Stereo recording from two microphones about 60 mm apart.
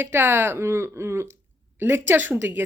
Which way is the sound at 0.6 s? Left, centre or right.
Right.